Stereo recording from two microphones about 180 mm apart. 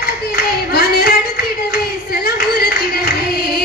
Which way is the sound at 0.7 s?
60° left (ahead or behind).